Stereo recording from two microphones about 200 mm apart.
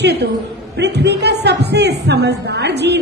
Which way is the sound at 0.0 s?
55° right (ahead or behind).